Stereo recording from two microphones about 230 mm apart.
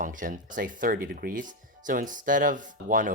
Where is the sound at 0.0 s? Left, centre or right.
Right.